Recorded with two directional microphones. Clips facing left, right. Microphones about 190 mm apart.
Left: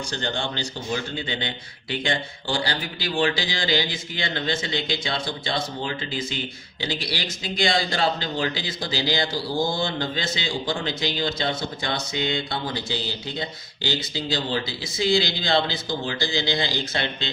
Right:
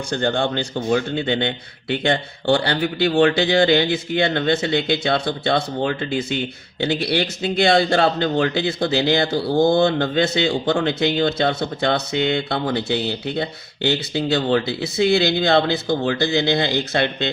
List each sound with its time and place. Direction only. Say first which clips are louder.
0.1 s speech: right 11 dB; 55° right (ahead or behind)